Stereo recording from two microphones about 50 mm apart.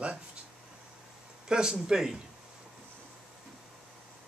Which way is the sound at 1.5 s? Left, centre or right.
Centre.